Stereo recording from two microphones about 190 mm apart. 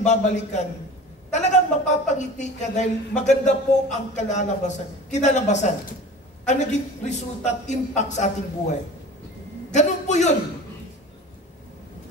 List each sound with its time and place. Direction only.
0.0 s a man's voice: 40° left (ahead or behind)
9.7 s a man's voice: 40° left (ahead or behind)